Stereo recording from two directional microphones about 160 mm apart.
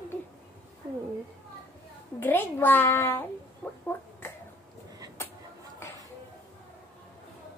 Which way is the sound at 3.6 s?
15° left (ahead or behind).